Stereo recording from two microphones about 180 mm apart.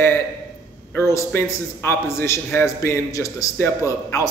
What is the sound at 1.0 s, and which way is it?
A man's voice, 15° left (ahead or behind).